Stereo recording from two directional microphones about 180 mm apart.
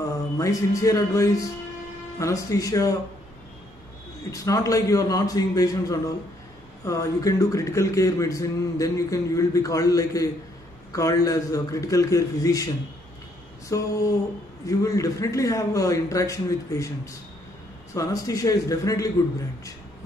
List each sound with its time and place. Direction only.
0.4 s speech: 20° left (ahead or behind)
4.3 s speech: 20° left (ahead or behind)
13.7 s speech: 20° left (ahead or behind)